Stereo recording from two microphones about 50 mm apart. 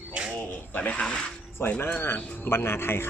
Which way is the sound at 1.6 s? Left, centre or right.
Left.